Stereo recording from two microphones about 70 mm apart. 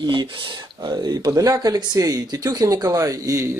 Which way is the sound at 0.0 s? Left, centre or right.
Right.